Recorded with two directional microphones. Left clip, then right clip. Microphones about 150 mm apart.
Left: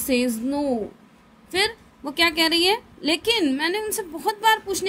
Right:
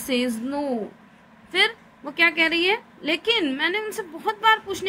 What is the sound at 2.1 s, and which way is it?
A woman's voice, 50° left (ahead or behind).